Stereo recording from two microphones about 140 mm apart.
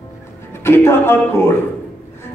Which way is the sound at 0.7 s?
15° left (ahead or behind).